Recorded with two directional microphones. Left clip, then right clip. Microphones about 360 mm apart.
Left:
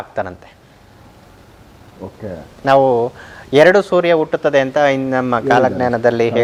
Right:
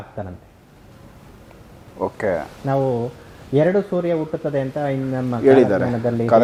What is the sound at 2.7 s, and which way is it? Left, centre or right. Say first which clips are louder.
Speech: left 10 dB; centre.